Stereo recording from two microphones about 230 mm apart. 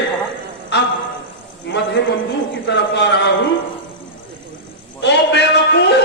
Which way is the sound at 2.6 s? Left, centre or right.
Left.